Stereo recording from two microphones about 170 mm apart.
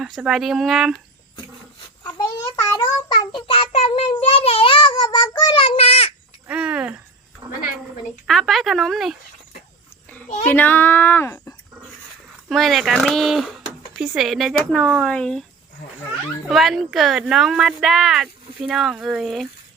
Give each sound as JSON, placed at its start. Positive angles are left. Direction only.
{"t": 0.0, "sound": "speech", "side_deg": -5}
{"t": 2.0, "sound": "child singing", "side_deg": 20}
{"t": 3.3, "sound": "child singing", "side_deg": 35}
{"t": 6.5, "sound": "a sound", "side_deg": -5}
{"t": 7.4, "sound": "a sound", "side_deg": -30}
{"t": 8.3, "sound": "speech", "side_deg": 0}
{"t": 10.4, "sound": "speech", "side_deg": 10}
{"t": 12.5, "sound": "speech", "side_deg": 0}
{"t": 16.5, "sound": "speech", "side_deg": 0}